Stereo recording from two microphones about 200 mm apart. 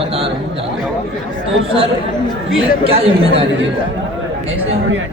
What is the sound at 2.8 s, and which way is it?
Speech, 30° right (ahead or behind).